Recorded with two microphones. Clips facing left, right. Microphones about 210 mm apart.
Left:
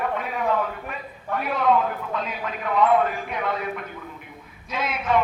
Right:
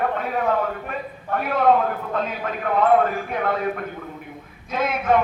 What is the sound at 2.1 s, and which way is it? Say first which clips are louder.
Speech: right 4 dB; 50° right (ahead or behind).